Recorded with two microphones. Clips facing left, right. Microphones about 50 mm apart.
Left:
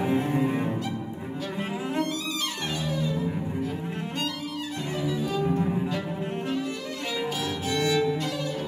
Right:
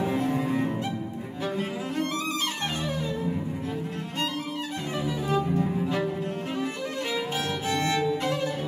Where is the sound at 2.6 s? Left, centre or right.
Right.